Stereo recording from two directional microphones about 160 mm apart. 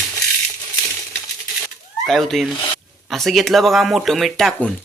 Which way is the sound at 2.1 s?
Centre (ahead or behind).